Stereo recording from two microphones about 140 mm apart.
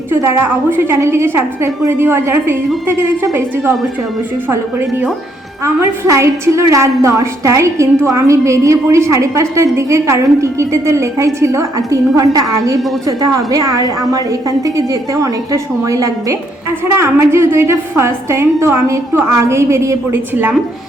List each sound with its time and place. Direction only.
0.1 s a woman's voice: 15° right (ahead or behind)
5.6 s a woman's voice: 20° right (ahead or behind)